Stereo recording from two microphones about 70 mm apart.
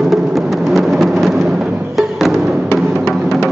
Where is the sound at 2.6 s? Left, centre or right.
Left.